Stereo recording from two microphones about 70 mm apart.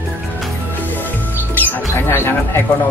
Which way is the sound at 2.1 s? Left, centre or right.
Left.